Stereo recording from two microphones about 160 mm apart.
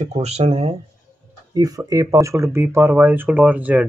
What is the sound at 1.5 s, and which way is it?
Speech, 20° right (ahead or behind).